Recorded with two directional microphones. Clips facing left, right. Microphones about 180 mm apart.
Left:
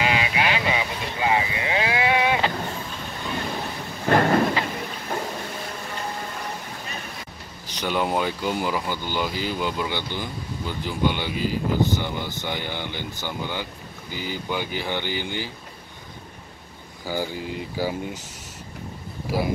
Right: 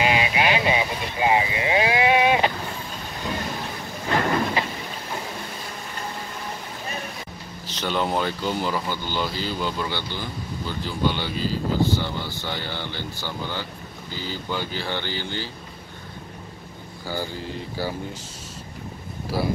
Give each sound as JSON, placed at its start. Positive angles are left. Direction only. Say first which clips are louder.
{"t": 0.0, "sound": "vehicle", "louder": "right 2 dB", "side_deg": -25}
{"t": 4.1, "sound": "train", "louder": "left 5 dB", "side_deg": 50}
{"t": 7.6, "sound": "speech", "louder": "even", "side_deg": 10}
{"t": 17.0, "sound": "speech", "louder": "left 2 dB", "side_deg": 15}
{"t": 19.3, "sound": "speech", "louder": "left 1 dB", "side_deg": 15}